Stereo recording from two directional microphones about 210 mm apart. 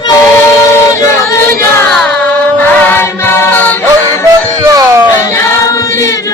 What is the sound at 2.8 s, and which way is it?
Music, 10° left (ahead or behind).